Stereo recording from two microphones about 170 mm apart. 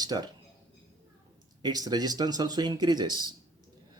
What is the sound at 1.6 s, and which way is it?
Speech, 25° right (ahead or behind).